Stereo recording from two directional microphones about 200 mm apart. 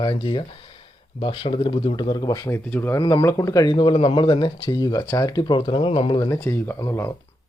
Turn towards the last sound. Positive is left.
turn(degrees=15)  # may be behind; listen again after turning